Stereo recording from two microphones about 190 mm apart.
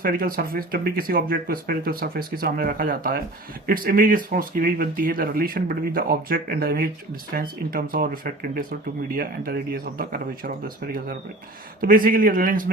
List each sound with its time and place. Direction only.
0.0 s speech: 50° right (ahead or behind)
11.8 s speech: 50° right (ahead or behind)